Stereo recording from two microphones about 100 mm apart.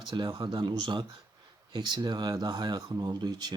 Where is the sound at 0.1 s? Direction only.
55° right (ahead or behind).